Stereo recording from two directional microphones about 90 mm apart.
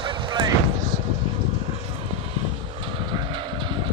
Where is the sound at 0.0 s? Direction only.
65° right (ahead or behind).